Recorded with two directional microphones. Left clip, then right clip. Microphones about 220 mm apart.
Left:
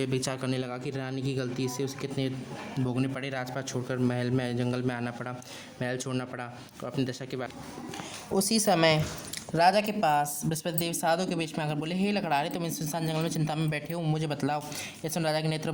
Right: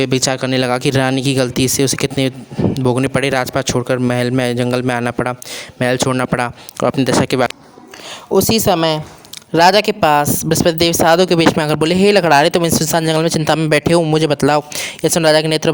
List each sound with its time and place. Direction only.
0.0 s speech: 40° right (ahead or behind)